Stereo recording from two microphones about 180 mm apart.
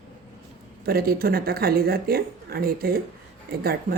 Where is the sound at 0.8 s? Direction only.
55° right (ahead or behind).